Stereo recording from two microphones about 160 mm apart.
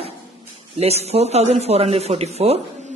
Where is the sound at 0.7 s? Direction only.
40° right (ahead or behind).